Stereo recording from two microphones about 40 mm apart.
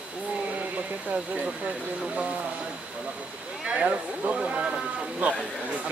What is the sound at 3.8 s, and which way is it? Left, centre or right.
Speech, right.